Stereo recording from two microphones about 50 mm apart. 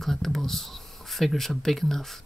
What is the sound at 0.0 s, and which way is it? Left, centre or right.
Speech, centre.